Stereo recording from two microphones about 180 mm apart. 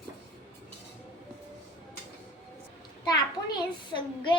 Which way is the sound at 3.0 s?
20° left (ahead or behind).